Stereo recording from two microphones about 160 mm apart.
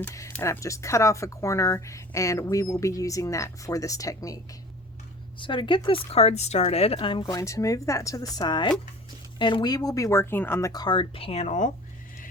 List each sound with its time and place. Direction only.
0.0 s speech: 15° left (ahead or behind)
5.4 s speech: 30° left (ahead or behind); by 11.7 s 45° left (ahead or behind)